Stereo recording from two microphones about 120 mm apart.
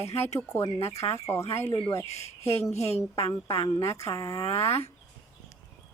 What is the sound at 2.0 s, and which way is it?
A woman's voice, 65° left (ahead or behind).